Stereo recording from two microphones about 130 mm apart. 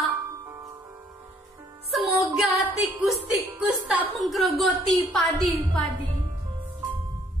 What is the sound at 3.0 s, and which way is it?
Music, 10° right (ahead or behind).